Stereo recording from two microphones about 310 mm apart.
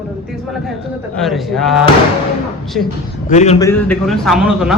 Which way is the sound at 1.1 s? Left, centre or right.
Centre.